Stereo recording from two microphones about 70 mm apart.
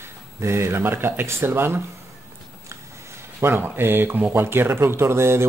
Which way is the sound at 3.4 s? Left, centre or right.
Right.